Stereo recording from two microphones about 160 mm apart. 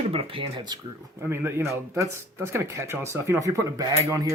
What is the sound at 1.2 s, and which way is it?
Speech, 15° right (ahead or behind).